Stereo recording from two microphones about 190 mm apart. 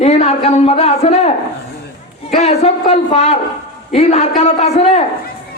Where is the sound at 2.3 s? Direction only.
35° left (ahead or behind).